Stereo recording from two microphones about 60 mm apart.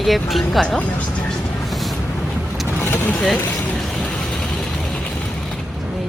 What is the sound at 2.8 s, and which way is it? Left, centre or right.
Vehicle, left.